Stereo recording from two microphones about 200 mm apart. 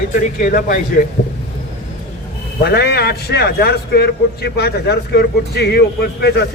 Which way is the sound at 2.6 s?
55° left (ahead or behind).